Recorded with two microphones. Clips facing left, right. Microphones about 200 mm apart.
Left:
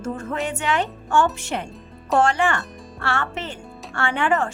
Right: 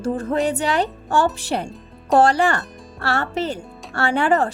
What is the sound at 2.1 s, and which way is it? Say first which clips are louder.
Speech: right 4 dB; 35° right (ahead or behind).